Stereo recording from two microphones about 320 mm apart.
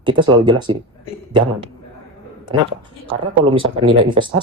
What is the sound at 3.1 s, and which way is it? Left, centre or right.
Speech, centre.